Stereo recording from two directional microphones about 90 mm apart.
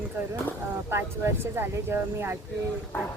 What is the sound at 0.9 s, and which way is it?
Speech, 25° right (ahead or behind).